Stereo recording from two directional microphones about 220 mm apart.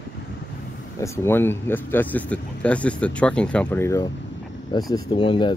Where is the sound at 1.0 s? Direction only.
10° left (ahead or behind).